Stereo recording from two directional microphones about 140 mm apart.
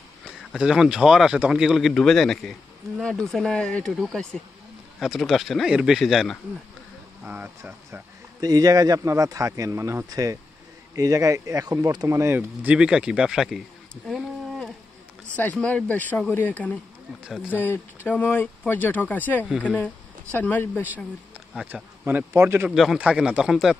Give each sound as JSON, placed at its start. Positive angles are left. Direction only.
{"t": 0.5, "sound": "speech", "side_deg": -5}
{"t": 7.2, "sound": "speech", "side_deg": -10}
{"t": 8.4, "sound": "speech", "side_deg": -25}
{"t": 15.2, "sound": "speech", "side_deg": 10}
{"t": 21.6, "sound": "speech", "side_deg": -15}
{"t": 22.7, "sound": "speech", "side_deg": 0}